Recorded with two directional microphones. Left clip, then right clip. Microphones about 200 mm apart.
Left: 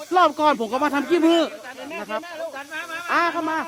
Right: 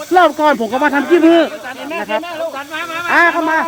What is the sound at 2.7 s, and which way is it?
Speech, 10° right (ahead or behind).